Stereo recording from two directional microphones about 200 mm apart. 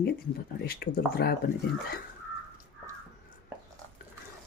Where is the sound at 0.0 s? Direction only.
50° left (ahead or behind).